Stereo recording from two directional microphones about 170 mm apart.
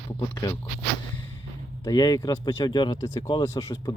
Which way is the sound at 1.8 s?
25° left (ahead or behind).